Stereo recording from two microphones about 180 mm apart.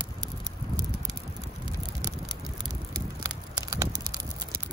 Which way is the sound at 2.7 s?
20° right (ahead or behind).